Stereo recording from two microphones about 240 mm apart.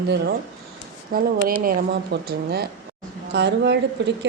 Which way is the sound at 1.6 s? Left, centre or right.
Right.